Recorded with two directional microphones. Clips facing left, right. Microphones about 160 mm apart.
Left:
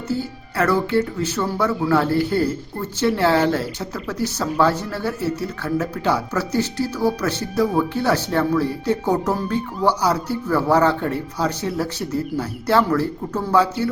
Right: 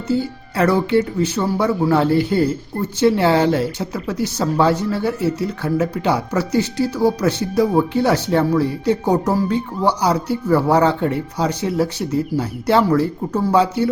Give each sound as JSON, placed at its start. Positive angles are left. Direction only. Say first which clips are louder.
{"t": 0.1, "sound": "speech", "louder": "right 6 dB", "side_deg": -15}